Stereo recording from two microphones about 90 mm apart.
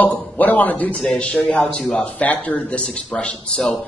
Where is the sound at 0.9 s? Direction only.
5° left (ahead or behind).